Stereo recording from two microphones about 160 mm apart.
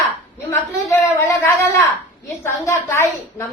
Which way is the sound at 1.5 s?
15° left (ahead or behind).